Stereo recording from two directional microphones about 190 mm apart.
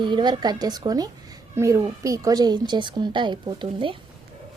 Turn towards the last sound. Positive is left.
turn(degrees=-25)  # may be behind; listen again after turning